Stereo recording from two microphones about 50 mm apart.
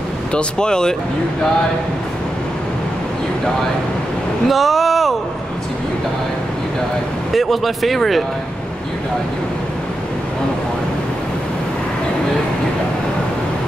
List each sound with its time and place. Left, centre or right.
0.3 s speech: centre
4.5 s speech: centre
7.3 s speech: centre